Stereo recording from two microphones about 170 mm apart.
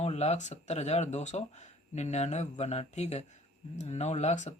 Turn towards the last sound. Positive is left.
turn(degrees=45)  # may be behind; listen again after turning